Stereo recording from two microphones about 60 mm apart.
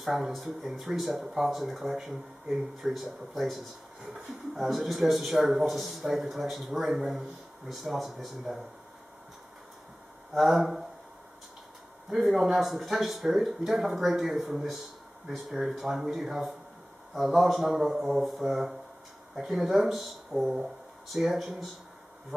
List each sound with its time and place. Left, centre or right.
0.0 s speech: centre
10.3 s speech: centre
12.1 s speech: centre